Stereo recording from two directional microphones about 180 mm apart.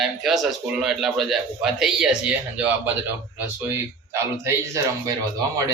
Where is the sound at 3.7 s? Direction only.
15° right (ahead or behind).